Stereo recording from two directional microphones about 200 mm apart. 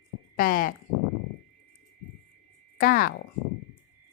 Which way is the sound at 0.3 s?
45° left (ahead or behind).